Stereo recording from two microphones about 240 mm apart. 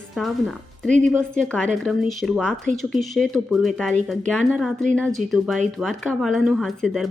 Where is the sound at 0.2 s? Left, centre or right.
Centre.